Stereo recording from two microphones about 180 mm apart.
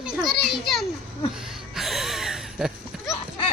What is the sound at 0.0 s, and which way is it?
Children playing, centre (ahead or behind).